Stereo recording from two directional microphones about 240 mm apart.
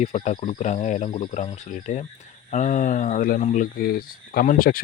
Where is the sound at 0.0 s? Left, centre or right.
Left.